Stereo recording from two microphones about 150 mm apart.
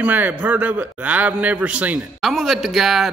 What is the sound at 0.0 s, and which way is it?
A man's voice, 10° right (ahead or behind).